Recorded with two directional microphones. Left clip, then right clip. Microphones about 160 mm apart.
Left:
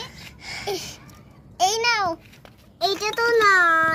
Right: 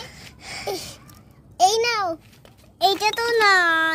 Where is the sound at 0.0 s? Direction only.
90° right.